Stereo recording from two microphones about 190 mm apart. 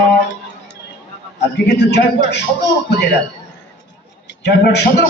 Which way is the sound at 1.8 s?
65° left (ahead or behind).